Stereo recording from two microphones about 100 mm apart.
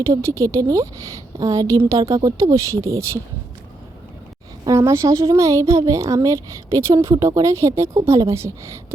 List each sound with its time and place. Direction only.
0.1 s a woman's voice: 30° right (ahead or behind)
4.6 s a woman's voice: 30° right (ahead or behind)